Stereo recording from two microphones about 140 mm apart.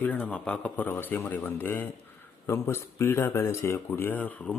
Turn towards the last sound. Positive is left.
turn(degrees=10)  # may be behind; listen again after turning